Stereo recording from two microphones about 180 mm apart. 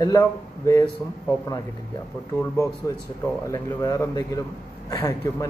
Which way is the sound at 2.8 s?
15° left (ahead or behind).